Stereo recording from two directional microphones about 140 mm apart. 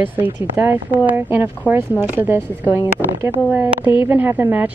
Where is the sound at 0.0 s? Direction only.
15° right (ahead or behind).